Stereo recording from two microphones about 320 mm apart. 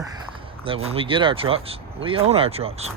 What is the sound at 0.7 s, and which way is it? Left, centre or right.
Speech, centre.